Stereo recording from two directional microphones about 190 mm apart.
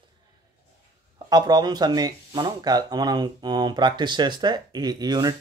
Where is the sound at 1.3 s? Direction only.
20° right (ahead or behind).